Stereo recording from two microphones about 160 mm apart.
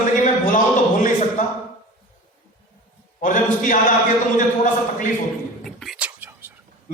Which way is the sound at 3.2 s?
50° left (ahead or behind).